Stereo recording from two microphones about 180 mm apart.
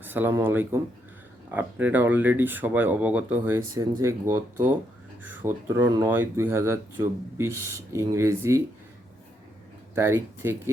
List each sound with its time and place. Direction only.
0.0 s speech: 10° right (ahead or behind)
9.9 s speech: 15° right (ahead or behind)